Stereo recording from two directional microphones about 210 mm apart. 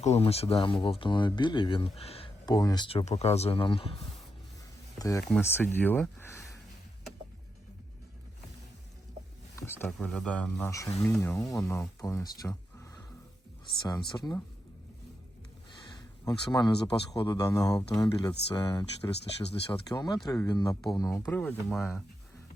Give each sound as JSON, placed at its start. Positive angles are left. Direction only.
{"t": 0.0, "sound": "speech", "side_deg": 30}
{"t": 4.9, "sound": "speech", "side_deg": 15}
{"t": 9.6, "sound": "speech", "side_deg": 10}
{"t": 14.1, "sound": "speech", "side_deg": 15}
{"t": 16.2, "sound": "speech", "side_deg": 20}